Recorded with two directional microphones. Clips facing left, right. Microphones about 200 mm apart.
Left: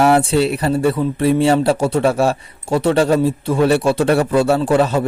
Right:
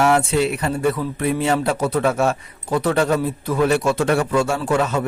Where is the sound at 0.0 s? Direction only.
35° left (ahead or behind).